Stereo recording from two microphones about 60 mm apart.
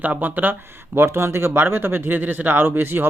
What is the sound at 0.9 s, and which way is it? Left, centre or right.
Speech, right.